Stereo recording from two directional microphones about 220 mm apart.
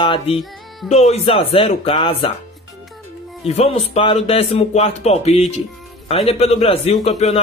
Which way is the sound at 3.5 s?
30° left (ahead or behind).